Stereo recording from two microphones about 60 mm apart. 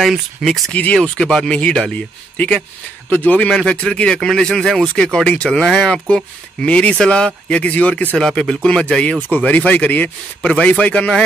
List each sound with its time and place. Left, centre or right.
0.4 s speech: centre
0.9 s a man's voice: centre; by 3.4 s left
3.4 s speech: centre
8.2 s a man's voice: centre